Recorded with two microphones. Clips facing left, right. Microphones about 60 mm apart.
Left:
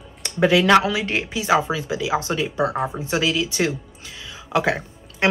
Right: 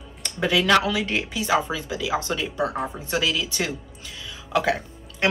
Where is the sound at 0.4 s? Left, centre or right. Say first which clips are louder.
Left 4 dB; left.